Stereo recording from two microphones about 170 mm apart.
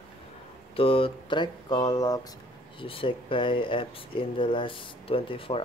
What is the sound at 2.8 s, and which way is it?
Speech, 30° left (ahead or behind).